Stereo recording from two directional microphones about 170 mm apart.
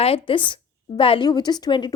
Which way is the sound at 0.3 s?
30° left (ahead or behind).